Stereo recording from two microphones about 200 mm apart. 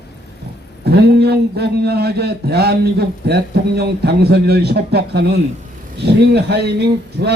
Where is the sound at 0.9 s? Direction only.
55° right (ahead or behind).